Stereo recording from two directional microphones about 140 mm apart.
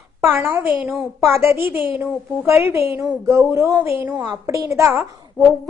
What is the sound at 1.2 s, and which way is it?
A woman's voice, 20° right (ahead or behind).